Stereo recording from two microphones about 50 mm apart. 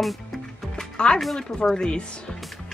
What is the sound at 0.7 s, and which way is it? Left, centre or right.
Music, centre.